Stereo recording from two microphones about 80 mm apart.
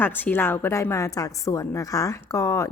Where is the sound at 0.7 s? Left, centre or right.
Left.